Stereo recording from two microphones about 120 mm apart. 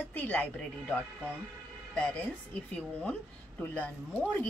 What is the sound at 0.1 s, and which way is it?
Speech, 15° left (ahead or behind).